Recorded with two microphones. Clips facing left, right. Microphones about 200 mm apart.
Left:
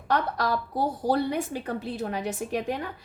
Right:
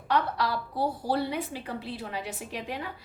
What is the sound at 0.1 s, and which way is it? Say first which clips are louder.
A woman's voice: left 2 dB; 45° left (ahead or behind).